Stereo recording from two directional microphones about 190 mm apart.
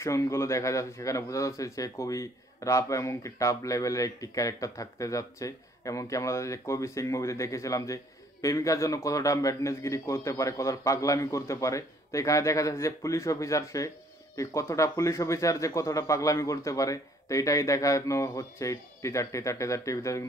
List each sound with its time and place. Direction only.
0.0 s speech: 15° left (ahead or behind)